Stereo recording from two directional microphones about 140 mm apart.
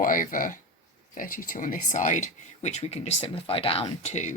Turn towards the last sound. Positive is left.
turn(degrees=55)  # may be behind; listen again after turning